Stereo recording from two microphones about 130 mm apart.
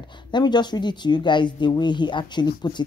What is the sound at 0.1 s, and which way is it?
Speech, 35° left (ahead or behind).